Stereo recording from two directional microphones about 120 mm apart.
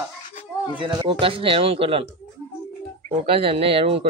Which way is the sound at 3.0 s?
50° right (ahead or behind).